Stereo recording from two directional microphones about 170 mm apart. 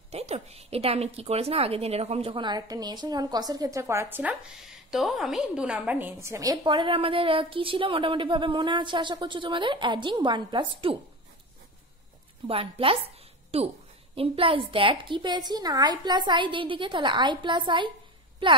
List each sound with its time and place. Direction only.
0.1 s a woman's voice: 40° right (ahead or behind)
12.4 s a woman's voice: 35° right (ahead or behind)